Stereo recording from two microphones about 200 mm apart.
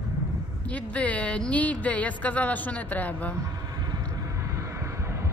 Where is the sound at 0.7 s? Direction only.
5° left (ahead or behind).